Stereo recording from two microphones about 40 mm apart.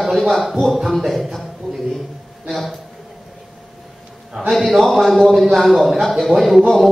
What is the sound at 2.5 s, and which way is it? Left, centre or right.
Speech, centre.